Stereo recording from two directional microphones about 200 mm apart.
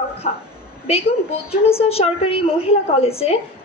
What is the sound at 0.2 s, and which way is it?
A woman's voice, 30° left (ahead or behind).